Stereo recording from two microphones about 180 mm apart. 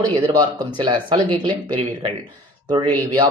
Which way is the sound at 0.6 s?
25° right (ahead or behind).